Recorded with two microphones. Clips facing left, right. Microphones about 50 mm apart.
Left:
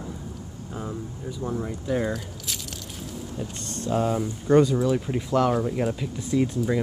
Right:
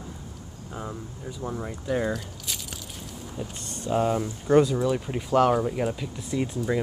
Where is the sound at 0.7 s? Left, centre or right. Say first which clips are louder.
Left 2 dB; centre.